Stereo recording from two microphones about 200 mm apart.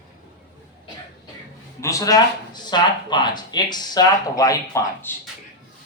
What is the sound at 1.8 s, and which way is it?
Speech, 15° left (ahead or behind).